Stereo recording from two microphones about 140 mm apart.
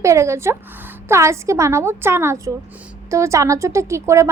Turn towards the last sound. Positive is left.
turn(degrees=-20)  # may be behind; listen again after turning